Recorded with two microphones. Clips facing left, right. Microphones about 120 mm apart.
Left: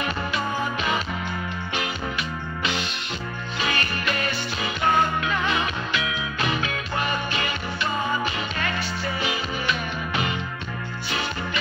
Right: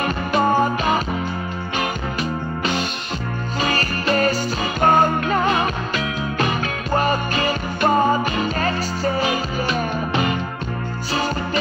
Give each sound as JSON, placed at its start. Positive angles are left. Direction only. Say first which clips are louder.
{"t": 0.0, "sound": "music", "louder": "right 8 dB", "side_deg": -45}
{"t": 3.6, "sound": "music", "louder": "right 5 dB", "side_deg": -40}